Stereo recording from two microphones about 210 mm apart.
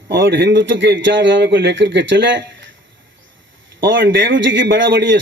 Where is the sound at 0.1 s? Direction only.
60° right (ahead or behind).